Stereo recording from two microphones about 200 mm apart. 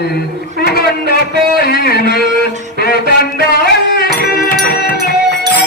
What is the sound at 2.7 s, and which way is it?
Music, 50° left (ahead or behind).